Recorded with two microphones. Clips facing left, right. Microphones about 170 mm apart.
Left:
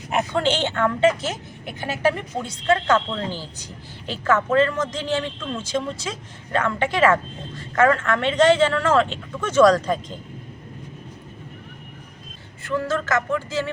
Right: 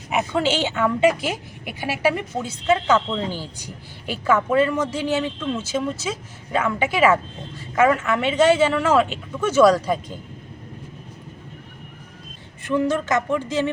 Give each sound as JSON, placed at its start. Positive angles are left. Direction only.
{"t": 0.1, "sound": "a woman's voice", "side_deg": -5}
{"t": 12.6, "sound": "a woman's voice", "side_deg": -20}